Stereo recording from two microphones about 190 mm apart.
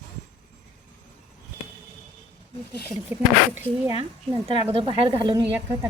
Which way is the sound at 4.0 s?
25° right (ahead or behind).